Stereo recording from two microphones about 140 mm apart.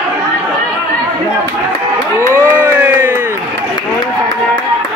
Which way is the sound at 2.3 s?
15° right (ahead or behind).